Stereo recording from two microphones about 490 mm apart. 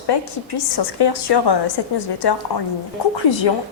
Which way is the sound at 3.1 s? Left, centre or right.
Left.